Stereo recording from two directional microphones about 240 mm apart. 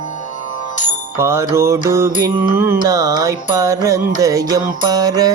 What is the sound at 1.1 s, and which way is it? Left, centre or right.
Music, centre.